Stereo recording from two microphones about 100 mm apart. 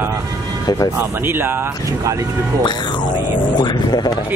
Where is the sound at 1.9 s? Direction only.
30° right (ahead or behind).